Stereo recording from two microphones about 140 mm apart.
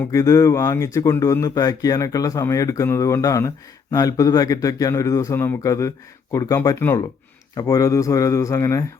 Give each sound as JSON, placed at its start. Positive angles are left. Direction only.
{"t": 0.0, "sound": "speech", "side_deg": 20}